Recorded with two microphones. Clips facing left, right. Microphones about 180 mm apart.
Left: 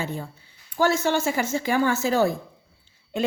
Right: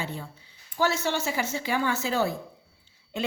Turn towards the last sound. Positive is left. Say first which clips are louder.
# left 5 dB
turn(degrees=50)  # may be behind; listen again after turning